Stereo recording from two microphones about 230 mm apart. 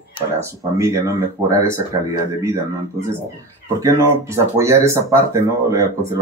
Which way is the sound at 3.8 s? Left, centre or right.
Centre.